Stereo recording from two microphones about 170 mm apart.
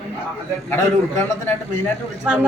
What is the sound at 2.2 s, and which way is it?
Speech, 5° right (ahead or behind).